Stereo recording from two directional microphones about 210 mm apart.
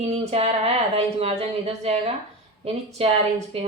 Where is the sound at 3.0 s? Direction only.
25° right (ahead or behind).